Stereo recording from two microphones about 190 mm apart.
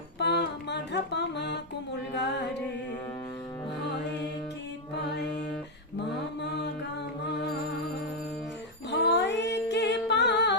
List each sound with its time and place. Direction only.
0.2 s music: 65° left (ahead or behind)
2.1 s mantra: 65° left (ahead or behind)
6.4 s music: 60° left (ahead or behind)
8.9 s music: 60° left (ahead or behind)